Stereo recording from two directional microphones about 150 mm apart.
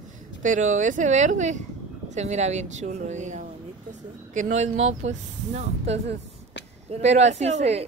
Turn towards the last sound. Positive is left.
turn(degrees=-45)  # may be behind; listen again after turning